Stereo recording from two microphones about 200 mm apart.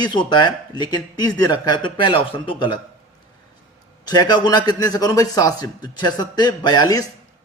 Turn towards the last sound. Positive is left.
turn(degrees=20)  # may be behind; listen again after turning